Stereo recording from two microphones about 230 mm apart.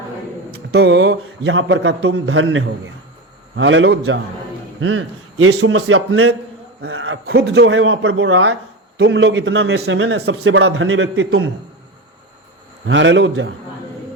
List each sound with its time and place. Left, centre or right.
0.7 s a man's voice: right
12.8 s a man's voice: right